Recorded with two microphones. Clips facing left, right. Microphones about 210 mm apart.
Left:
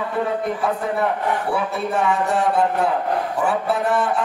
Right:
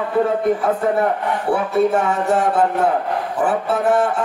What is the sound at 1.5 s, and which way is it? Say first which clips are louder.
Speech: right 6 dB; 45° right (ahead or behind).